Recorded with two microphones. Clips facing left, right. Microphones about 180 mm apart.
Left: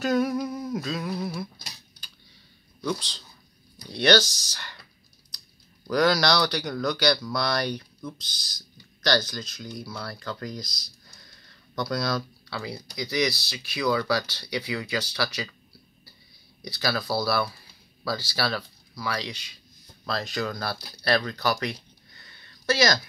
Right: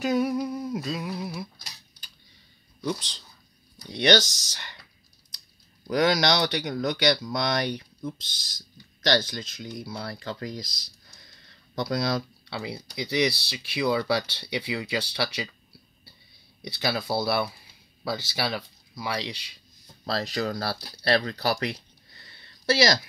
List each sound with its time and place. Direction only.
0.0 s humming: 10° right (ahead or behind)
2.8 s speech: 15° right (ahead or behind)
5.9 s speech: 20° right (ahead or behind)
16.6 s speech: 25° right (ahead or behind)